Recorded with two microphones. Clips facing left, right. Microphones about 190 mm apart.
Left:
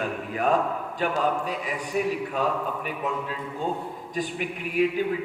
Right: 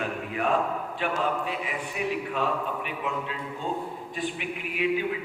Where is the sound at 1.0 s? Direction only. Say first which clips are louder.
Left 3 dB; 40° left (ahead or behind).